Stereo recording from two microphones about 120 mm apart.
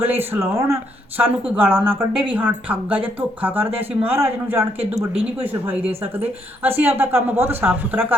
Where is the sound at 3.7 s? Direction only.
55° right (ahead or behind).